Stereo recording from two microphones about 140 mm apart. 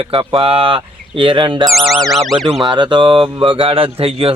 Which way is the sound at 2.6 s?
35° right (ahead or behind).